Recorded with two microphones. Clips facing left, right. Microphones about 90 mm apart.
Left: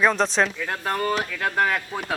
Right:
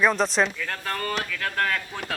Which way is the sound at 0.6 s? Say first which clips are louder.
Left 4 dB; 20° left (ahead or behind).